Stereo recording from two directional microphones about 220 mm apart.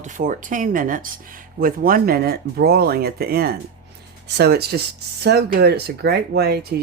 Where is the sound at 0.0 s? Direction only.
35° right (ahead or behind).